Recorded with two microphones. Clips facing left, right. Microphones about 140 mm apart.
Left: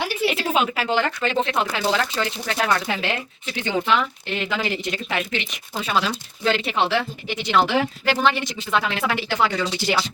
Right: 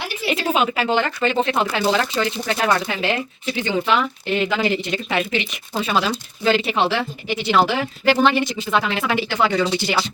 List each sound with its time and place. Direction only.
0.3 s a woman's voice: centre (ahead or behind)
9.6 s speech: 25° right (ahead or behind)